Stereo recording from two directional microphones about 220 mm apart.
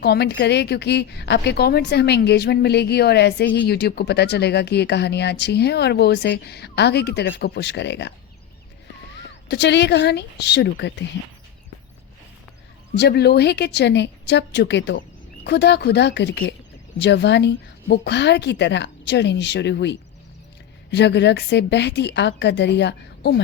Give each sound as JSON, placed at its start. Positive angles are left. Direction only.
{"t": 0.0, "sound": "speech", "side_deg": 50}
{"t": 9.1, "sound": "speech", "side_deg": 50}
{"t": 13.0, "sound": "speech", "side_deg": 50}